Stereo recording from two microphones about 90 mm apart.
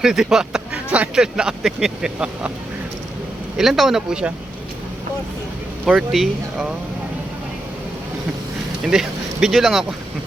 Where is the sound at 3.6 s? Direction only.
Centre (ahead or behind).